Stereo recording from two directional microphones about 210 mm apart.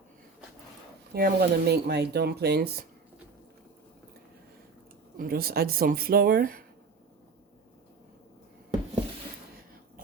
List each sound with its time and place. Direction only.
1.1 s speech: 50° right (ahead or behind)
5.1 s speech: 45° right (ahead or behind)